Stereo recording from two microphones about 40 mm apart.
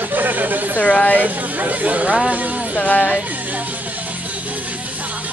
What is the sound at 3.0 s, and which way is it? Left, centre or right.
Music, right.